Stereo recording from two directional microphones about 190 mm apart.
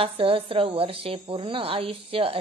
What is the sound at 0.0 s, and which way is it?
A woman's voice, 30° right (ahead or behind).